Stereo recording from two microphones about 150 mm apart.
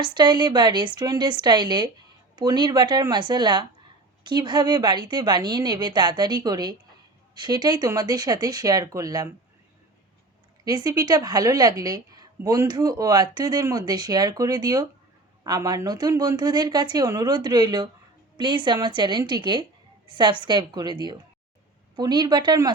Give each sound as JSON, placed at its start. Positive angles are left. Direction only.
{"t": 0.0, "sound": "a woman's voice", "side_deg": -30}
{"t": 10.6, "sound": "a woman's voice", "side_deg": -25}